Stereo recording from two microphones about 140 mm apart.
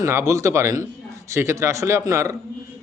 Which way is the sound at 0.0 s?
20° right (ahead or behind).